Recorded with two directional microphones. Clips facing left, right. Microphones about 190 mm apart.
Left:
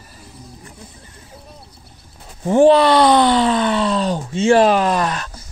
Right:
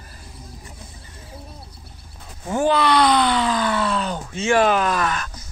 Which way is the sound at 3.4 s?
25° left (ahead or behind).